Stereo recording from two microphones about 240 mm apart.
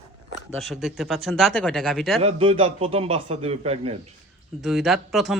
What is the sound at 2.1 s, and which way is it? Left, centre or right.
A man's voice, right.